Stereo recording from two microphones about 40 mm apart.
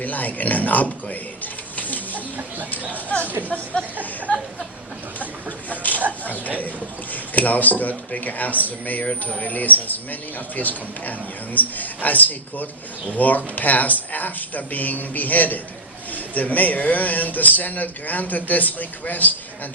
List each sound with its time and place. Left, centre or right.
0.0 s speech: left
1.7 s chicken: left
3.1 s speech: left
5.6 s a sound: left
7.1 s speech: left